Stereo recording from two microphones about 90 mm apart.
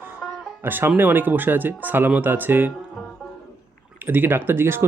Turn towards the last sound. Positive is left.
turn(degrees=-25)  # may be behind; listen again after turning